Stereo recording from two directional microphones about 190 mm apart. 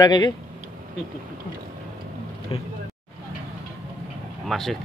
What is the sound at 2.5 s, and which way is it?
Speech, 25° left (ahead or behind).